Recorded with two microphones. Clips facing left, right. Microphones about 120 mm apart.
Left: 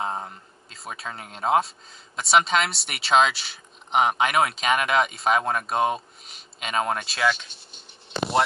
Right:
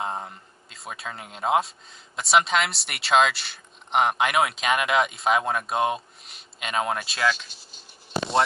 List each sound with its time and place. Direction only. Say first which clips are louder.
0.0 s speech: left 1 dB; centre (ahead or behind)
7.2 s speech: left 1 dB; 20° left (ahead or behind)